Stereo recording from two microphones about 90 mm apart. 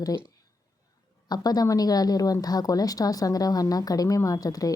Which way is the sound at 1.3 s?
45° left (ahead or behind).